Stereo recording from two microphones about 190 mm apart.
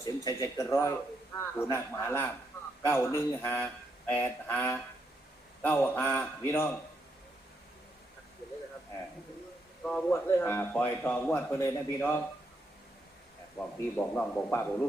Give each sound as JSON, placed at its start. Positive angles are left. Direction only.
{"t": 0.0, "sound": "a man's voice", "side_deg": 20}
{"t": 9.8, "sound": "a man's voice", "side_deg": 5}
{"t": 13.6, "sound": "a man's voice", "side_deg": 10}